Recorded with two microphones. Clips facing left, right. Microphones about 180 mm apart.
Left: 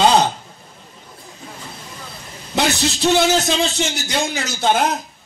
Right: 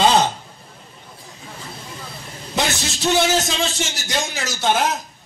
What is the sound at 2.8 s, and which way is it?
A man's voice, centre (ahead or behind).